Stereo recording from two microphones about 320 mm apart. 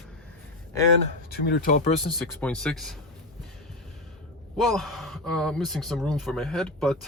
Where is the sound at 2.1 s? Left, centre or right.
Centre.